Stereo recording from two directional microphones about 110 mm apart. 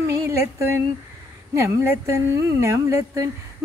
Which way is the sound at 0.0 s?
25° right (ahead or behind).